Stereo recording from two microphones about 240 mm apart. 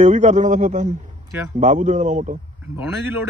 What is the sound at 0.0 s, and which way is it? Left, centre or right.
A man's voice, right.